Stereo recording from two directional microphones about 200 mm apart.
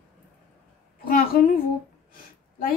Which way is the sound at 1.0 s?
45° left (ahead or behind).